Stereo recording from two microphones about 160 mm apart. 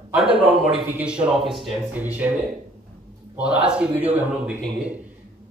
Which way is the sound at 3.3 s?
5° right (ahead or behind).